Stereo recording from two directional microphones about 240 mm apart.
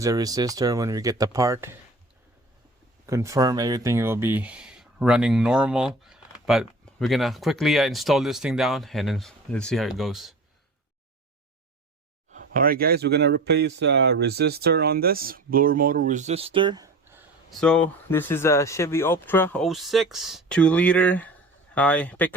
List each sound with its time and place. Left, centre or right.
0.0 s speech: centre
3.1 s speech: centre
12.3 s speech: right; by 17.2 s centre
17.5 s speech: centre